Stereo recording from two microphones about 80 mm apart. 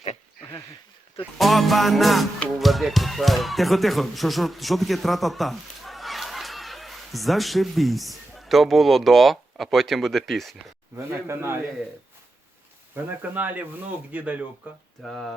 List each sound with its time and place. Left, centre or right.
1.4 s music: centre
2.6 s speech: centre
10.9 s a man's voice: right
13.3 s speech: right
15.0 s music: centre